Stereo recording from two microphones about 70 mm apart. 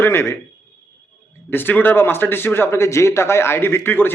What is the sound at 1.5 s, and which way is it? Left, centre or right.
A man's voice, left.